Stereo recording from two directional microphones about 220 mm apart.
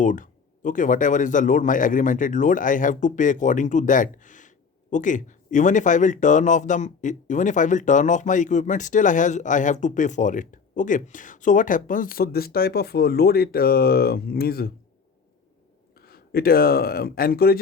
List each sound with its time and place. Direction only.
0.0 s speech: 35° left (ahead or behind)
16.0 s speech: 45° left (ahead or behind)